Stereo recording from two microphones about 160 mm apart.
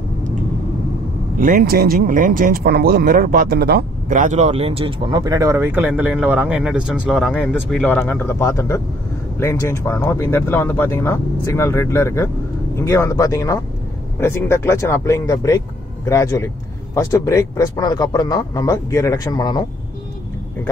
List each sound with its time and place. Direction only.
1.4 s speech: 65° right (ahead or behind); by 3.8 s 85° right
4.1 s speech: 50° right (ahead or behind); by 7.4 s 5° right (ahead or behind)
7.7 s a man's voice: 10° left (ahead or behind); by 19.6 s 25° left (ahead or behind)